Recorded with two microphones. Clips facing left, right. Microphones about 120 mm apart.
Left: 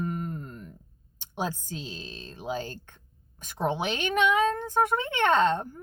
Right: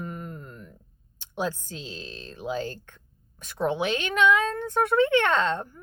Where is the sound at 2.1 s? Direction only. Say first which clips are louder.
Right 2 dB; 20° left (ahead or behind).